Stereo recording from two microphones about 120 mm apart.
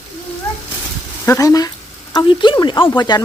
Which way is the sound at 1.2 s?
25° left (ahead or behind).